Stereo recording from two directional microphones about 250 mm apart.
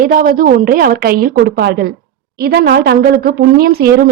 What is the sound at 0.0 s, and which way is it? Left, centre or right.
A woman's voice, right.